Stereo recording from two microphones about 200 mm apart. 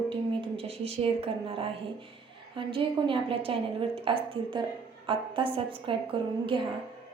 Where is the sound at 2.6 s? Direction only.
25° right (ahead or behind).